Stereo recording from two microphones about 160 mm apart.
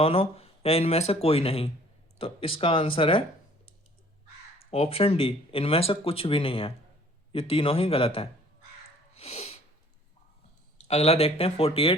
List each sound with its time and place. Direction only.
0.0 s speech: 40° left (ahead or behind)
4.7 s speech: 35° left (ahead or behind)
9.1 s sneeze: 40° left (ahead or behind)
10.8 s speech: 40° left (ahead or behind)